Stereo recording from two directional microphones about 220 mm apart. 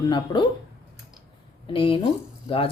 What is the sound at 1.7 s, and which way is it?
Speech, 25° left (ahead or behind).